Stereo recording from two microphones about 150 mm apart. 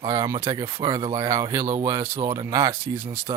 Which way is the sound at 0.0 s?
25° right (ahead or behind).